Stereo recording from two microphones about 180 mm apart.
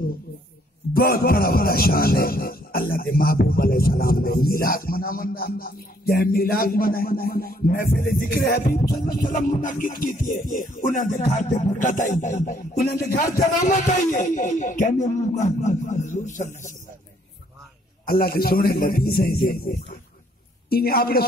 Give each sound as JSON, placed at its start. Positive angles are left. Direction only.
{"t": 0.9, "sound": "music", "side_deg": 55}
{"t": 12.1, "sound": "speech", "side_deg": 40}
{"t": 18.0, "sound": "music", "side_deg": 55}
{"t": 20.7, "sound": "music", "side_deg": 55}